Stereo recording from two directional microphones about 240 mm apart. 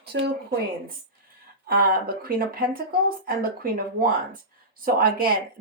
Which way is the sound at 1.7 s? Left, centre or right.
Right.